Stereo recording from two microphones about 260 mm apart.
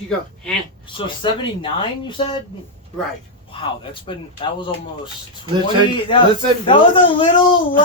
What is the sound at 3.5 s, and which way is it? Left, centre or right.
Speech, centre.